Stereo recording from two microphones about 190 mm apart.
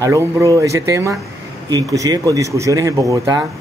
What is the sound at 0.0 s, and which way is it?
A man's voice, 15° right (ahead or behind).